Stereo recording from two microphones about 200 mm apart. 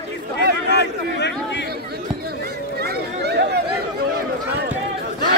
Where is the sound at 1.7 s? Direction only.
50° right (ahead or behind).